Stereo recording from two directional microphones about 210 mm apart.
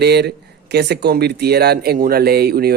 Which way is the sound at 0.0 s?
50° right (ahead or behind).